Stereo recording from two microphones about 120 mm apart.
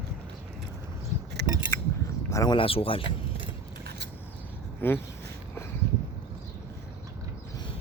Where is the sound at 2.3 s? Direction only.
25° left (ahead or behind).